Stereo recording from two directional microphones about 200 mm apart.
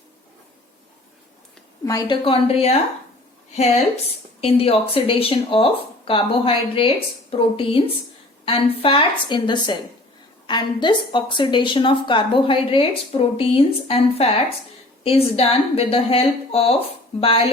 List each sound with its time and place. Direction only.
1.8 s a woman's voice: 15° left (ahead or behind)
4.4 s a woman's voice: 30° left (ahead or behind)